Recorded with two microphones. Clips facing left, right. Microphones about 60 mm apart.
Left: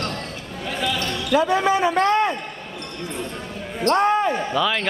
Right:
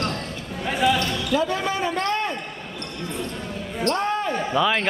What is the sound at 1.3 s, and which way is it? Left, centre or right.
Speech, left.